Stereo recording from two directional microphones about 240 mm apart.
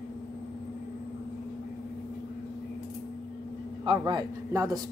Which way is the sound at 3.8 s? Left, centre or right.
Centre.